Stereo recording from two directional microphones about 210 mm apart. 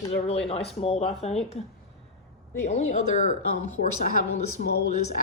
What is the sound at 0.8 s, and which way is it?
Speech, 30° left (ahead or behind).